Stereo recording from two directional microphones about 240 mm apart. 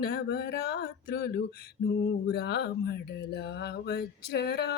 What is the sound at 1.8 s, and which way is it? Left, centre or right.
Female singing, left.